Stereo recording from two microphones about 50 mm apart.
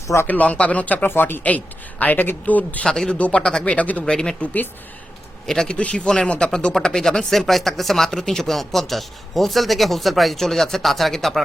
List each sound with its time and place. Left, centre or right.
0.3 s speech: left
1.0 s speech: left
1.5 s speech: left
2.8 s speech: centre
3.2 s speech: left
3.4 s speech: centre
3.8 s speech: left
4.0 s speech: centre
5.5 s speech: centre
5.7 s speech: left; by 11.4 s centre